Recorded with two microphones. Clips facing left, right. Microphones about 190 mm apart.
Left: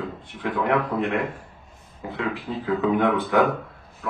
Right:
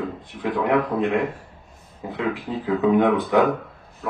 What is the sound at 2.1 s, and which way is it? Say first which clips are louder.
Speech: right 2 dB; 20° right (ahead or behind).